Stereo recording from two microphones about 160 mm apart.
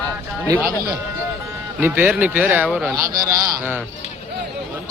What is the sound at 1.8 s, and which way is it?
Speech, 10° right (ahead or behind).